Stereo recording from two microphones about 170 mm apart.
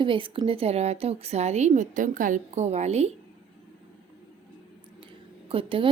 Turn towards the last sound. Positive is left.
turn(degrees=-30)  # may be behind; listen again after turning